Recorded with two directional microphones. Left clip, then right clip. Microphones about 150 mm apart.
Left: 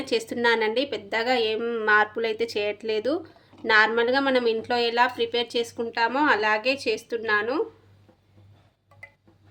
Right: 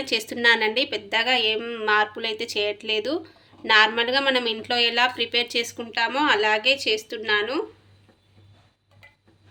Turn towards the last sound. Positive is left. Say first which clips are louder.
# even
turn(degrees=50)  # may be behind; listen again after turning